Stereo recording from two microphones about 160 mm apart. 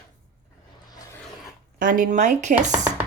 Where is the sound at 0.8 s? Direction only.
20° left (ahead or behind).